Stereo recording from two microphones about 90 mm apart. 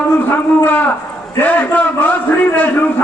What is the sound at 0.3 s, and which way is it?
A man's voice, 20° left (ahead or behind).